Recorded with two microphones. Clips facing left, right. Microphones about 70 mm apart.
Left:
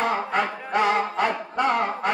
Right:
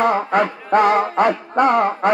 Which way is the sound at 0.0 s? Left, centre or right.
Right.